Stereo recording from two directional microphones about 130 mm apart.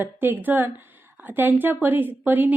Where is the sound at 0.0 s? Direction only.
15° right (ahead or behind).